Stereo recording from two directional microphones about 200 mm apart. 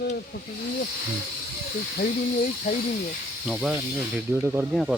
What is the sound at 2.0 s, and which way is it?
Speech, 40° left (ahead or behind).